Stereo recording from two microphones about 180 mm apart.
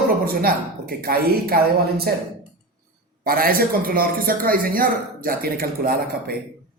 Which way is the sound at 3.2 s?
55° right (ahead or behind).